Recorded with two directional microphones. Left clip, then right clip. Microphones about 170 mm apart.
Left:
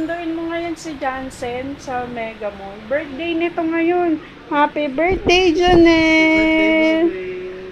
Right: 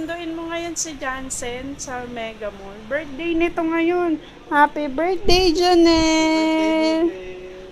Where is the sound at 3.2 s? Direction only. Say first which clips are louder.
Left 1 dB; 40° right (ahead or behind).